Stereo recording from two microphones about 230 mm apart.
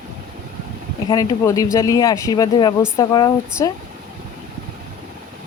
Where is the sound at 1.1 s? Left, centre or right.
Centre.